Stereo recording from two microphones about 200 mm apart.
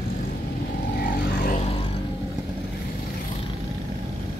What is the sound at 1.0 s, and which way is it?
Vehicle, 45° left (ahead or behind).